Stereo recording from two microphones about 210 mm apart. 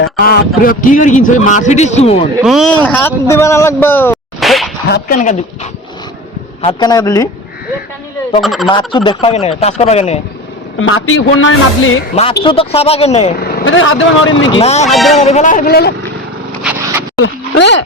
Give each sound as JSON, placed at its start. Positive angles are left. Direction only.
{"t": 0.0, "sound": "a man's voice", "side_deg": 45}
{"t": 2.4, "sound": "a man's voice", "side_deg": 0}
{"t": 4.4, "sound": "a sound", "side_deg": 0}
{"t": 4.9, "sound": "speech", "side_deg": 50}
{"t": 6.6, "sound": "a man's voice", "side_deg": 25}
{"t": 8.4, "sound": "speech", "side_deg": 0}
{"t": 8.6, "sound": "speech", "side_deg": 20}
{"t": 10.8, "sound": "a man's voice", "side_deg": 75}
{"t": 12.1, "sound": "speech", "side_deg": 25}
{"t": 13.7, "sound": "a man's voice", "side_deg": 70}
{"t": 14.6, "sound": "a man's voice", "side_deg": 30}
{"t": 14.8, "sound": "speech", "side_deg": 0}
{"t": 15.2, "sound": "a man's voice", "side_deg": 35}
{"t": 17.2, "sound": "speech", "side_deg": 65}